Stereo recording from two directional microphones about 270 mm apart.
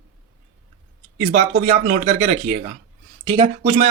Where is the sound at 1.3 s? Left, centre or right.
Right.